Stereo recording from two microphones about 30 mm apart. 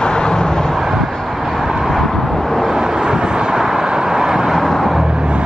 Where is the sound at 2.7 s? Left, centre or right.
Right.